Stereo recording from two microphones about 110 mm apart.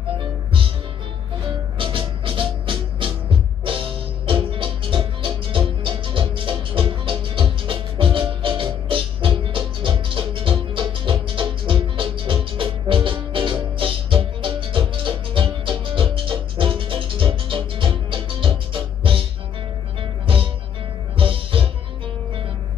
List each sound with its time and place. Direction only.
1.8 s music: 50° right (ahead or behind)